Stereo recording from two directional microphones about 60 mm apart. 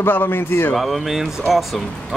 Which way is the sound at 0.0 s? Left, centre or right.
Left.